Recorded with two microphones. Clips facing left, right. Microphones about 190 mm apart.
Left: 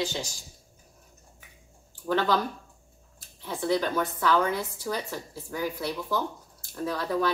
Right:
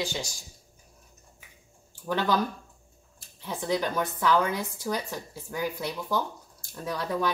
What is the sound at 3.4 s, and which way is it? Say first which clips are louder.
Speech: left 2 dB; 15° right (ahead or behind).